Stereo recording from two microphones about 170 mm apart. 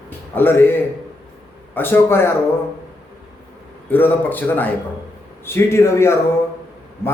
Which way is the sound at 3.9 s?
10° left (ahead or behind).